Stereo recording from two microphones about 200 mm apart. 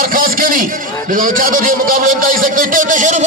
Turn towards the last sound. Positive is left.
turn(degrees=-40)  # may be behind; listen again after turning